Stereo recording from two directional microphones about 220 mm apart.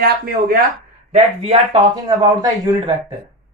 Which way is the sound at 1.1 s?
30° right (ahead or behind).